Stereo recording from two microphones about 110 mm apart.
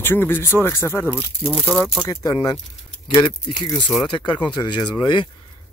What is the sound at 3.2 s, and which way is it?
Speech, 45° left (ahead or behind).